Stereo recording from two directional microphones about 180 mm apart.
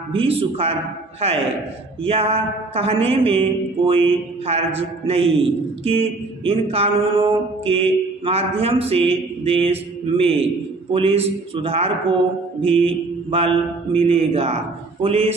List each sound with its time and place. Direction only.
0.1 s speech: 30° right (ahead or behind)